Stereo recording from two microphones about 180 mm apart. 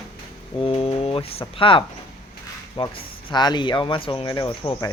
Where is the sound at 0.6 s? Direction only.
30° left (ahead or behind).